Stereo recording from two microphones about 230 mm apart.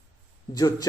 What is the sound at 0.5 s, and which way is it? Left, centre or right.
Speech, centre.